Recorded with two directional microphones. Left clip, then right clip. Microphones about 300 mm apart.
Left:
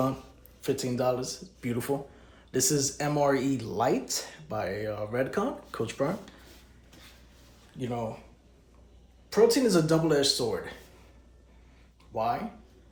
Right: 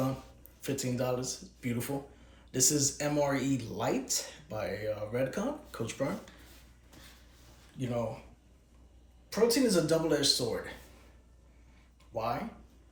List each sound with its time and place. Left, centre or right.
0.6 s speech: centre
7.8 s speech: centre
9.3 s speech: centre
12.1 s speech: centre